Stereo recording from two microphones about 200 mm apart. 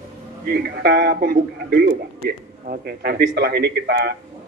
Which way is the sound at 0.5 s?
50° right (ahead or behind).